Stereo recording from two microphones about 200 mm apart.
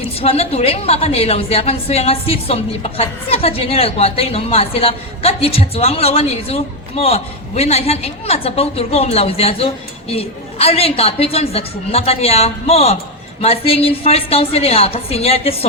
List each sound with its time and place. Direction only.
0.0 s a woman's voice: 30° left (ahead or behind)